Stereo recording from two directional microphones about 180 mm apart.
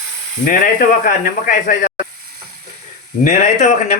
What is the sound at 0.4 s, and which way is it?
A man's voice, 50° left (ahead or behind).